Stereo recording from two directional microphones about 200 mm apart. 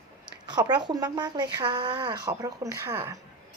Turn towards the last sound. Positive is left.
turn(degrees=-15)  # may be behind; listen again after turning